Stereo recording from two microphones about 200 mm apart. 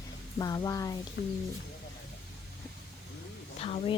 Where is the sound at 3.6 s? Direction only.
30° left (ahead or behind).